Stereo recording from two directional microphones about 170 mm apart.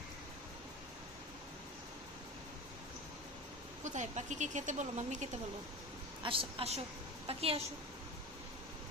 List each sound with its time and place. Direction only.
3.8 s speech: 45° right (ahead or behind)
6.2 s a woman's voice: 30° right (ahead or behind)